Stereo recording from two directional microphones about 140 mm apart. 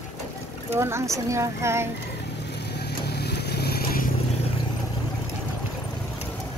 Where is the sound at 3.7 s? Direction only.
90° left.